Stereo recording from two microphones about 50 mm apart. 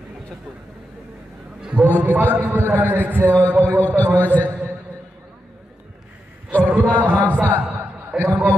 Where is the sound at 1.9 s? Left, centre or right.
Left.